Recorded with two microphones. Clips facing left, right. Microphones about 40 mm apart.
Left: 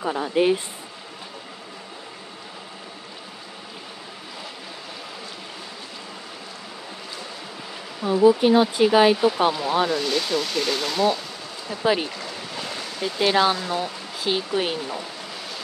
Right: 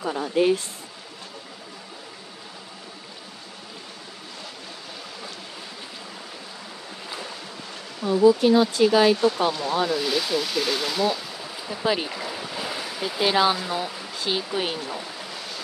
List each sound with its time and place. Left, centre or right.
0.0 s speech: centre
8.2 s speech: left
9.9 s speech: centre
11.4 s stream: centre
11.8 s speech: centre
12.1 s stream: centre